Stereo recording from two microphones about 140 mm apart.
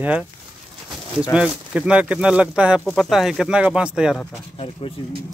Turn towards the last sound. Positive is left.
turn(degrees=40)  # may be behind; listen again after turning